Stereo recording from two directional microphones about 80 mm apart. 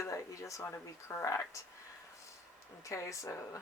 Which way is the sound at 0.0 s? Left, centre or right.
Left.